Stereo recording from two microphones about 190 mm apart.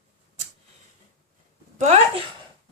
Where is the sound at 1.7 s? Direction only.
40° right (ahead or behind).